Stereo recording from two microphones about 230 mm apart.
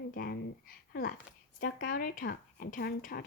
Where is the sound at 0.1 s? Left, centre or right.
Left.